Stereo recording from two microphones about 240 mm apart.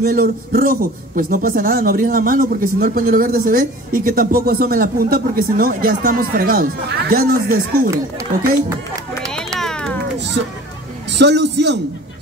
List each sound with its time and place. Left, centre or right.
0.0 s a man's voice: right
9.6 s a sound: centre
10.1 s music: right
11.1 s a man's voice: right